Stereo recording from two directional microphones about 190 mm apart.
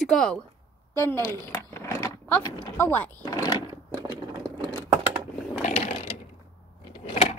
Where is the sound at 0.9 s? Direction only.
15° left (ahead or behind).